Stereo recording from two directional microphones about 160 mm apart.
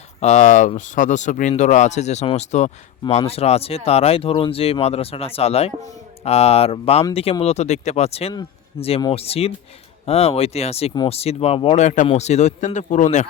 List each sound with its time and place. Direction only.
0.2 s speech: 45° left (ahead or behind)